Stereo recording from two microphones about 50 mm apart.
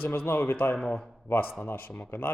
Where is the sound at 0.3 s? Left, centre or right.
Left.